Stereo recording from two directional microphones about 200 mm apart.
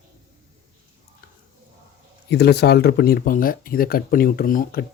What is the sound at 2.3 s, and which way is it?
Speech, 55° left (ahead or behind).